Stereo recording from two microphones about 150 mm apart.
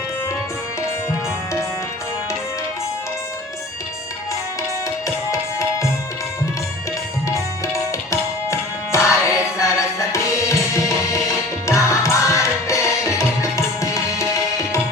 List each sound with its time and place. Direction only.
5.0 s music: 20° left (ahead or behind)
7.3 s music: 20° left (ahead or behind)